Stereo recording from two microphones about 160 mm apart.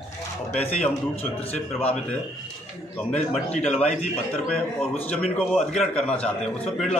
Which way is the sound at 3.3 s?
45° left (ahead or behind).